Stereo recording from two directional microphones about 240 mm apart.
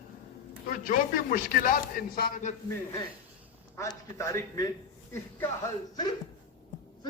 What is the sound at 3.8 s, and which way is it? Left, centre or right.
Speech, centre.